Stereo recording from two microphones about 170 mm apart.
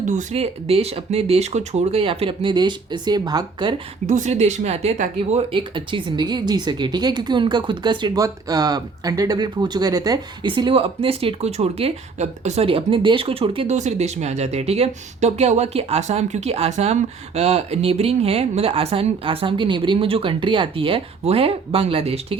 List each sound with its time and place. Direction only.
0.0 s speech: 45° right (ahead or behind); by 3.8 s 25° right (ahead or behind)
4.0 s speech: 45° right (ahead or behind)